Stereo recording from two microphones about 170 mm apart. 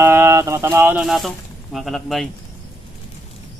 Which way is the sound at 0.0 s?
15° right (ahead or behind).